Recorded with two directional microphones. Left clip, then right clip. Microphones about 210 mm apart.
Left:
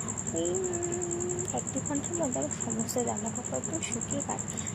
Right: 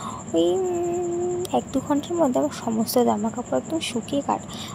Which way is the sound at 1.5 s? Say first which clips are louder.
Right 11 dB; 40° right (ahead or behind).